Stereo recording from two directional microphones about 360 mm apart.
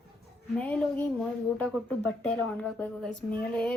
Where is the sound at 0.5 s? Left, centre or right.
Centre.